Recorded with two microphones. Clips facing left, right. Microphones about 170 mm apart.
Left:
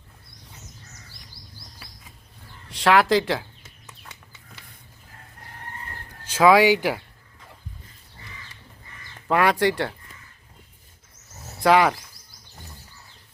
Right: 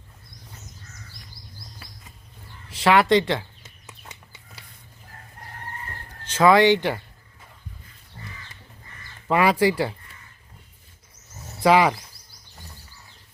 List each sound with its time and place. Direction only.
2.6 s speech: centre (ahead or behind)
3.6 s chicken: 15° right (ahead or behind)
6.2 s speech: 5° left (ahead or behind)
9.2 s speech: centre (ahead or behind)
11.6 s speech: centre (ahead or behind)